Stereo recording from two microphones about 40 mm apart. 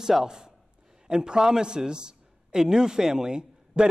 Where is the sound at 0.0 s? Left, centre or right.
Centre.